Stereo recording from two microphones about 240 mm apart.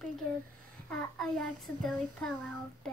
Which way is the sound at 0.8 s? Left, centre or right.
Centre.